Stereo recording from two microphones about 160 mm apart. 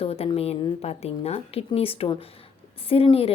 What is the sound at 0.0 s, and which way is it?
A woman's voice, 35° left (ahead or behind).